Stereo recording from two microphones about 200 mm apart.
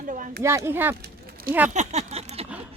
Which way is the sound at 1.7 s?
35° right (ahead or behind).